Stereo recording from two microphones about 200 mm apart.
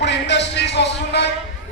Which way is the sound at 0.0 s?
60° left (ahead or behind).